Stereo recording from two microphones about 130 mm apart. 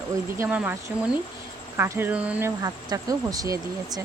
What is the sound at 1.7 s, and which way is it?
Speech, 15° right (ahead or behind).